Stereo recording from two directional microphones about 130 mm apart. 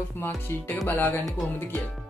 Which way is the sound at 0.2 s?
15° left (ahead or behind).